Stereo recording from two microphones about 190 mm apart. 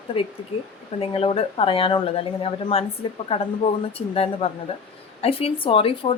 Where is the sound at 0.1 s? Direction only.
30° left (ahead or behind).